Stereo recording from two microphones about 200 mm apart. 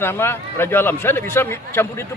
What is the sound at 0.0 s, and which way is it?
A man's voice, 10° left (ahead or behind).